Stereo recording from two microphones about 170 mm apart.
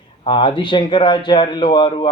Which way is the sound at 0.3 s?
30° left (ahead or behind).